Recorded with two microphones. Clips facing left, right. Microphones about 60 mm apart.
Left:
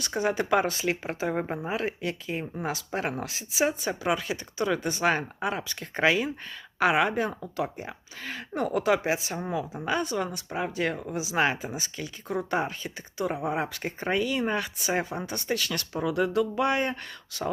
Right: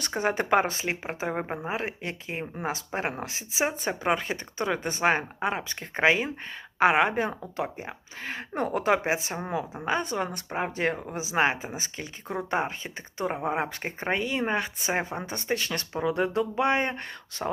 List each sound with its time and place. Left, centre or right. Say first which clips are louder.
0.0 s a woman's voice: even; right